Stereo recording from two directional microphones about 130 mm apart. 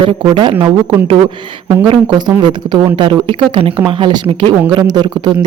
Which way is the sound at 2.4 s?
35° right (ahead or behind).